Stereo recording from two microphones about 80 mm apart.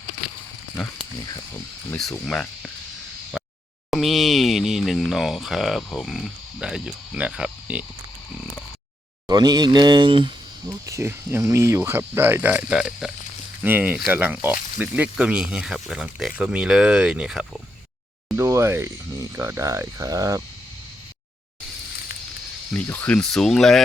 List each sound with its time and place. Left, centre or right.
2.0 s speech: centre
3.3 s a sound: centre
3.9 s speech: centre
9.2 s speech: right
10.7 s speech: right; by 13.1 s centre
13.6 s speech: right
18.3 s speech: right
22.7 s speech: left
23.3 s speech: centre